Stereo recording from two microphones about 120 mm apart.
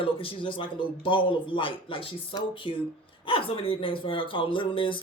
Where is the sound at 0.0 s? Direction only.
50° left (ahead or behind).